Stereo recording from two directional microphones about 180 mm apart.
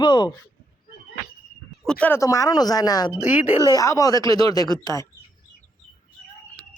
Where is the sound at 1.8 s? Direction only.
5° left (ahead or behind).